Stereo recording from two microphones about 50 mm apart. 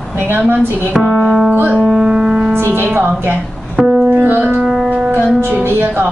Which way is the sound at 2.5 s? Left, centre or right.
Right.